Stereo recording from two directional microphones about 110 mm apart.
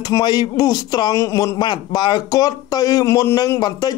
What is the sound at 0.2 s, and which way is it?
Speech, 40° left (ahead or behind).